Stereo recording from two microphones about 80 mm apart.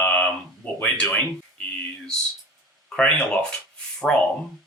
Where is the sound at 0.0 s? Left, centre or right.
Centre.